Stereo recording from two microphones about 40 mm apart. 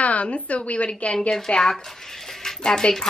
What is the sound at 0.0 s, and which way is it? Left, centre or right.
A woman's voice, left.